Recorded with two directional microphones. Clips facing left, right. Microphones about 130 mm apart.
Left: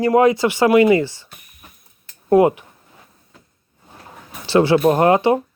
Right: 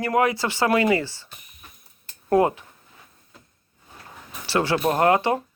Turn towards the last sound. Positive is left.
turn(degrees=20)  # may be behind; listen again after turning